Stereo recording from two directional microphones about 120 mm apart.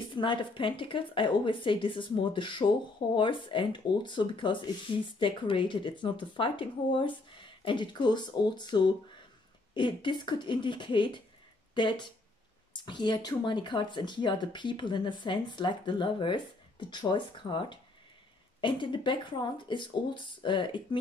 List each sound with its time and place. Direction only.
0.1 s speech: 40° left (ahead or behind)